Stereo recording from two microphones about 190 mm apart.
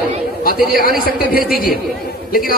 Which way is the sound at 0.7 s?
50° left (ahead or behind).